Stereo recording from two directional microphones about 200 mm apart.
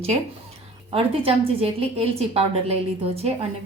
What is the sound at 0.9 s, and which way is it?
A woman's voice, 30° right (ahead or behind).